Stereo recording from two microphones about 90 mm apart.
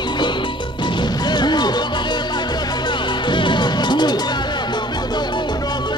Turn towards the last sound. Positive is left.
turn(degrees=50)  # may be behind; listen again after turning